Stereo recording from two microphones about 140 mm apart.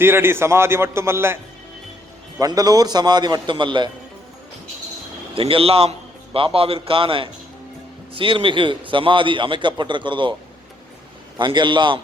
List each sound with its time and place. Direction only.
0.0 s a man's voice: 15° right (ahead or behind)
2.4 s a man's voice: 25° right (ahead or behind)
5.3 s a man's voice: 40° right (ahead or behind)
11.3 s a man's voice: 35° right (ahead or behind)